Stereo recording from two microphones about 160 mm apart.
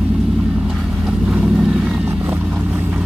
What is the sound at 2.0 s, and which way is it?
Vehicle, 15° right (ahead or behind).